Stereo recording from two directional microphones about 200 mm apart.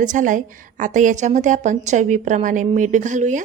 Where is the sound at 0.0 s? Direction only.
40° right (ahead or behind).